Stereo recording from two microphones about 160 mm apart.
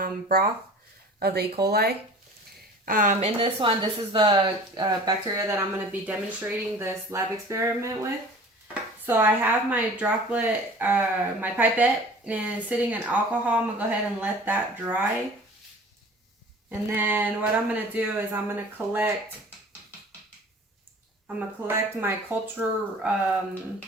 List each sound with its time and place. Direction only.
0.0 s speech: 65° right (ahead or behind)
1.2 s speech: 75° right (ahead or behind)
2.8 s speech: 60° right (ahead or behind)
3.2 s speech: 35° right (ahead or behind); by 15.0 s 10° right (ahead or behind)
16.6 s speech: 10° right (ahead or behind)
21.3 s speech: 15° right (ahead or behind)